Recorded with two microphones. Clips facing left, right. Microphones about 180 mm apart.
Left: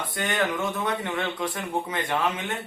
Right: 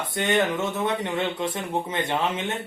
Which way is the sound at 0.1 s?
25° right (ahead or behind).